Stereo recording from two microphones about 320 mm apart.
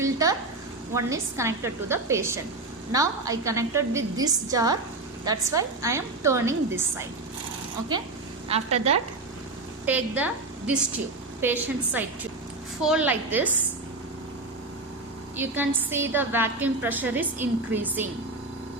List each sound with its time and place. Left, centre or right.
0.0 s a sound: centre
0.9 s a woman's voice: centre
8.4 s a woman's voice: centre
9.8 s a woman's voice: centre
15.4 s a woman's voice: centre